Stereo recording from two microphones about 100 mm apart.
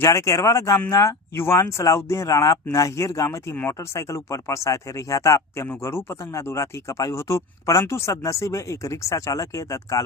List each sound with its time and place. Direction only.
0.0 s speech: 30° left (ahead or behind)